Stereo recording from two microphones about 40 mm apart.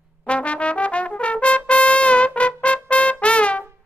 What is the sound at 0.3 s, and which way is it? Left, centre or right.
Trumpet, left.